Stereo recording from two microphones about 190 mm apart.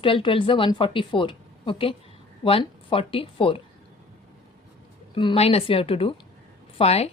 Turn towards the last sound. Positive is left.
turn(degrees=35)  # may be behind; listen again after turning